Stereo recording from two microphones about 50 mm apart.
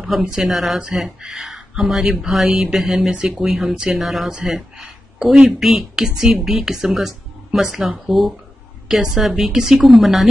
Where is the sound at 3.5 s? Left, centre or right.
Centre.